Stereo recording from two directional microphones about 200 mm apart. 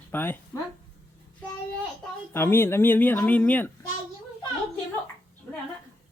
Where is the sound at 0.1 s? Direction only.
10° left (ahead or behind).